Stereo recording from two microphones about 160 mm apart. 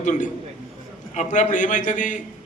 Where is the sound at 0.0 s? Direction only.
50° left (ahead or behind).